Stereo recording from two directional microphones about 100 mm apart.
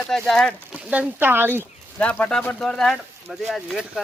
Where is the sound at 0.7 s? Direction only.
15° right (ahead or behind).